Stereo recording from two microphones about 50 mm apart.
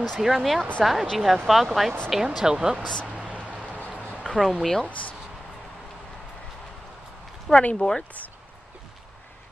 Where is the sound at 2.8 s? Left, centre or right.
Centre.